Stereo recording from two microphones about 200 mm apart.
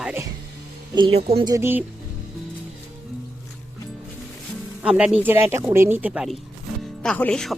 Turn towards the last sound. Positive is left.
turn(degrees=5)  # may be behind; listen again after turning